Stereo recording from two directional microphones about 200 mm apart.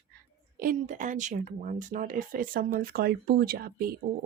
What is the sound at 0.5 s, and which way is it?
Speech, 45° right (ahead or behind).